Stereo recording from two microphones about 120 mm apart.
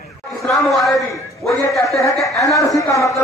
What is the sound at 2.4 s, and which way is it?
Speech, 30° left (ahead or behind).